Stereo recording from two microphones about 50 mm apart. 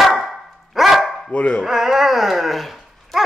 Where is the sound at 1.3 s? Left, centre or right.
Centre.